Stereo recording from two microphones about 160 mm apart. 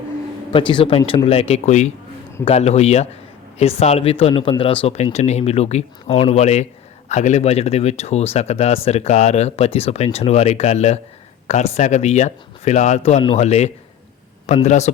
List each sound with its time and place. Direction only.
0.5 s speech: 30° left (ahead or behind); by 14.9 s 45° left (ahead or behind)